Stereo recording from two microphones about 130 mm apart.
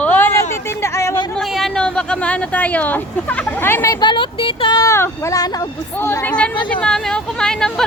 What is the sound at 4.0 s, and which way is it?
Speech, 40° left (ahead or behind).